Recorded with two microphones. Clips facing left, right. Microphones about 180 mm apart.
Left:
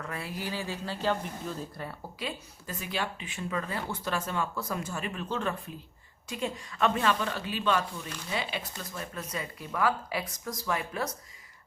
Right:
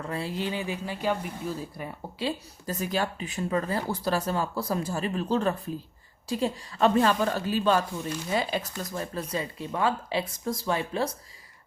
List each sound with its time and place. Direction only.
0.0 s speech: 30° right (ahead or behind); by 2.0 s 10° right (ahead or behind)
2.1 s speech: 35° right (ahead or behind)